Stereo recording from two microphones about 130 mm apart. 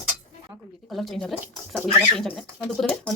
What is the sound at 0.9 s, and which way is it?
Speech, centre (ahead or behind).